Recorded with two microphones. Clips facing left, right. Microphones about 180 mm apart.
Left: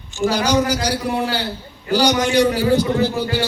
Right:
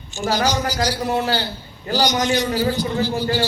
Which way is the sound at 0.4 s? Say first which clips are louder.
Left 3 dB; 60° left (ahead or behind).